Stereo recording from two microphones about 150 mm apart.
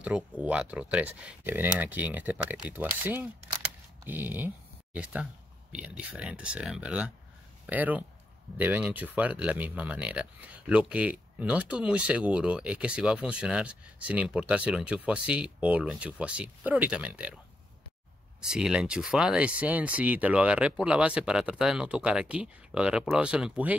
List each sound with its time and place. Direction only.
0.0 s speech: 10° right (ahead or behind)
18.4 s speech: 5° right (ahead or behind)